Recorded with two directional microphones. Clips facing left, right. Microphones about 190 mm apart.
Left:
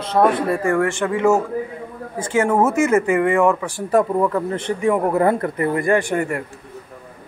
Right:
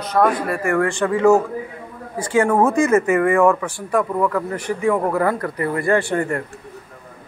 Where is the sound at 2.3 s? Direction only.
20° left (ahead or behind).